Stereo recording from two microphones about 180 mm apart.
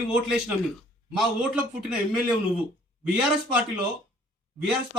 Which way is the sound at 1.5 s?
5° right (ahead or behind).